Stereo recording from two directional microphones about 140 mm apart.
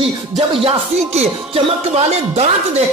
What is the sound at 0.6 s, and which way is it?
Speech, 45° right (ahead or behind).